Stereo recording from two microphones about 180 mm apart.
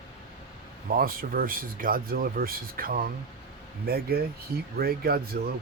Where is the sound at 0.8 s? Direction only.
55° right (ahead or behind).